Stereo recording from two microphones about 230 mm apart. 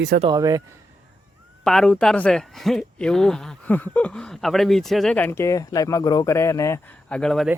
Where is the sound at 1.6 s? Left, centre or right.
Centre.